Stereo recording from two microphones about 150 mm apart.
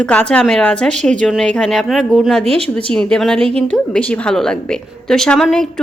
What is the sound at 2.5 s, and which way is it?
Speech, 40° right (ahead or behind).